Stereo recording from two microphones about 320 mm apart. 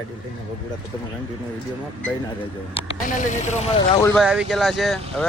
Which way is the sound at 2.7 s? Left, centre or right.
Left.